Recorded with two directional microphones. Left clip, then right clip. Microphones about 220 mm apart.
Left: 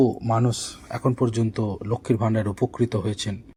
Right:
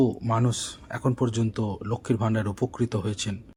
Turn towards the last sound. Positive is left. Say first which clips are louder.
# left 4 dB
turn(degrees=10)  # may be behind; listen again after turning